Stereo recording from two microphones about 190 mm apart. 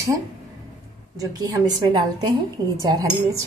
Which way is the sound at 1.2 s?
20° right (ahead or behind).